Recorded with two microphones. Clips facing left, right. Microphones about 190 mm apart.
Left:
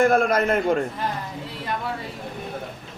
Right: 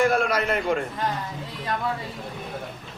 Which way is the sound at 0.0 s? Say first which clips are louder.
Left 3 dB; 50° left (ahead or behind).